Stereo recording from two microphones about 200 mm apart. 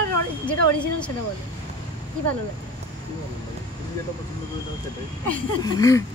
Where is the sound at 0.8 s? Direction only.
5° left (ahead or behind).